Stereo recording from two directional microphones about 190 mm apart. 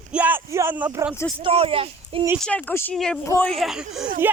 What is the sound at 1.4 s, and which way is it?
Speech, 30° right (ahead or behind).